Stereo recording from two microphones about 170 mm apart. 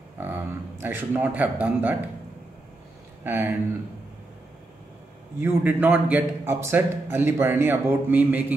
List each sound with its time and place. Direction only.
0.2 s a man's voice: 10° right (ahead or behind)
3.3 s a man's voice: 10° right (ahead or behind)
5.4 s a man's voice: 10° right (ahead or behind)